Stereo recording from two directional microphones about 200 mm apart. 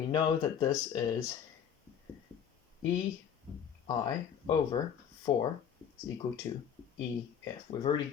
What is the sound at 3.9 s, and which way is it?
Speech, 20° left (ahead or behind).